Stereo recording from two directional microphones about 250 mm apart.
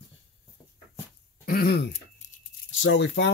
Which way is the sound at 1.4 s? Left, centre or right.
Left.